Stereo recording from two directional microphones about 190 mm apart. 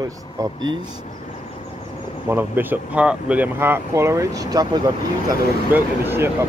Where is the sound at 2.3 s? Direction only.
10° right (ahead or behind).